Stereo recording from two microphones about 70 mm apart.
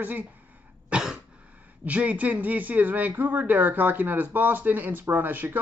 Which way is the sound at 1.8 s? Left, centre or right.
Right.